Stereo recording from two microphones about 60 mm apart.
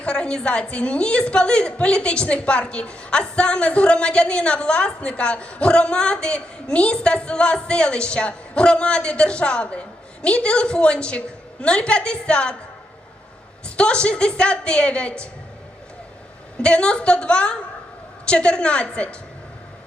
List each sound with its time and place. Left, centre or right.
0.0 s a woman's voice: centre
13.7 s a woman's voice: centre
16.6 s a woman's voice: centre